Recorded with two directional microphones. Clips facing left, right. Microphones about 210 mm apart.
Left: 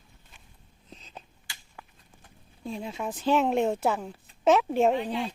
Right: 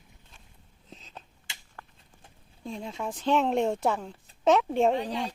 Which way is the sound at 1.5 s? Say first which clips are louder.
Even; 20° right (ahead or behind).